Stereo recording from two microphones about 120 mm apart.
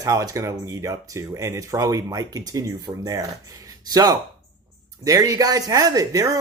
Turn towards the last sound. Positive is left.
turn(degrees=-30)  # may be behind; listen again after turning